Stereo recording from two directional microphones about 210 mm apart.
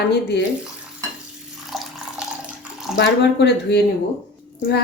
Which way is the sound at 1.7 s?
Centre (ahead or behind).